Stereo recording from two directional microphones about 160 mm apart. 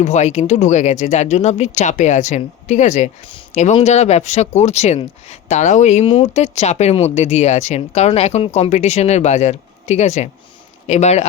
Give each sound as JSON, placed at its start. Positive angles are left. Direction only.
{"t": 0.0, "sound": "speech", "side_deg": 45}